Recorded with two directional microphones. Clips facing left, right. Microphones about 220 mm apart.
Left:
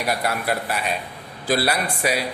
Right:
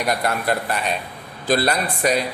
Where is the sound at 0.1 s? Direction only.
5° left (ahead or behind).